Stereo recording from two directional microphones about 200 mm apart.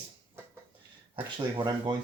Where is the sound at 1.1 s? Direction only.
25° right (ahead or behind).